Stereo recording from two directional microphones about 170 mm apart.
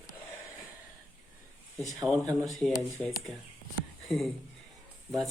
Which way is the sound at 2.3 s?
5° left (ahead or behind).